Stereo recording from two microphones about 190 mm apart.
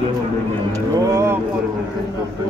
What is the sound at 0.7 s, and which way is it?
Speech, 15° right (ahead or behind).